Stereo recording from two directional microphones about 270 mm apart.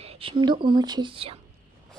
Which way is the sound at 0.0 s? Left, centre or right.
Right.